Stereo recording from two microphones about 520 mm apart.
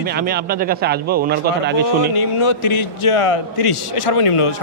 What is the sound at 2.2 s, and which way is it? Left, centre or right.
A man's voice, left.